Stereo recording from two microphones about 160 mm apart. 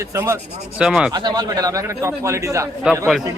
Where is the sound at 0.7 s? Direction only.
5° right (ahead or behind).